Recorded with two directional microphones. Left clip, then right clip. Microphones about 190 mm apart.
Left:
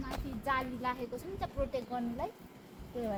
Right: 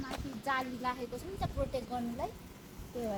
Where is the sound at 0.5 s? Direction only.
25° left (ahead or behind).